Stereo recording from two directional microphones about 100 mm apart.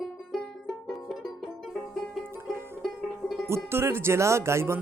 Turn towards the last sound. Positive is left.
turn(degrees=-25)  # may be behind; listen again after turning